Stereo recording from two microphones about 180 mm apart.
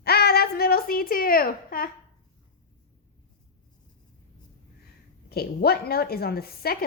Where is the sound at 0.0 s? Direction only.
60° left (ahead or behind).